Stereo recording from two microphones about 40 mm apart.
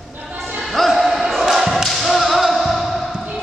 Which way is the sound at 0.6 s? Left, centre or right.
Centre.